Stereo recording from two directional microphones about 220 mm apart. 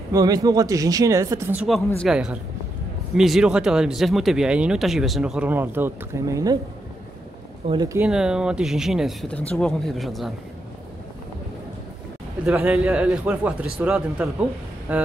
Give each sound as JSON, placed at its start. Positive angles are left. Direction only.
{"t": 0.1, "sound": "speech", "side_deg": -15}
{"t": 7.6, "sound": "speech", "side_deg": -20}
{"t": 8.0, "sound": "speech", "side_deg": -5}
{"t": 12.4, "sound": "speech", "side_deg": -5}